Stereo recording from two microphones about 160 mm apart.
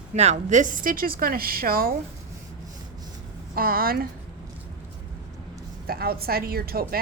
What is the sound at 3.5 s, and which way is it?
Speech, 65° right (ahead or behind).